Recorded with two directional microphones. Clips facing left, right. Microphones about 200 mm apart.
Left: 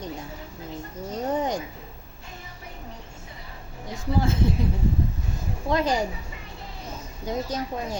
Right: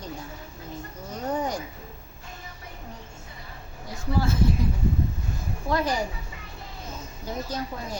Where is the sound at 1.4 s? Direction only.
20° left (ahead or behind).